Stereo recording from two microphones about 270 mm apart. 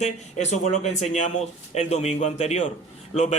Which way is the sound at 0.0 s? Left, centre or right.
Left.